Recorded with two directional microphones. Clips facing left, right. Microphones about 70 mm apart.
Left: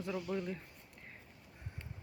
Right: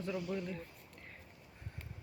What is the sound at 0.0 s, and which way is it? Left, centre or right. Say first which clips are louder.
Speech: left 1 dB; centre.